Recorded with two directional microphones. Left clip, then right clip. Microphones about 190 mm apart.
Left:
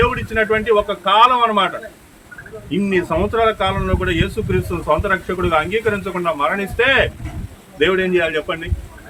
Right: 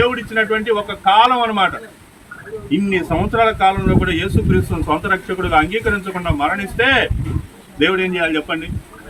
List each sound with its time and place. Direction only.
0.0 s speech: 20° left (ahead or behind)